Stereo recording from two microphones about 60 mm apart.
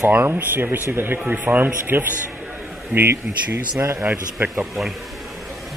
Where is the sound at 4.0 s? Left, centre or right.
Right.